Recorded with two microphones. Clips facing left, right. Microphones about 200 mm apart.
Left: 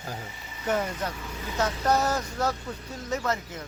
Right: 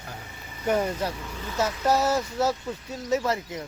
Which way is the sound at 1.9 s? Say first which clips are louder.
Right 3 dB; 5° right (ahead or behind).